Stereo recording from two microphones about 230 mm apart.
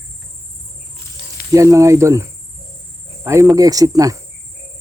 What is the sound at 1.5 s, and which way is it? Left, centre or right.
Speech, centre.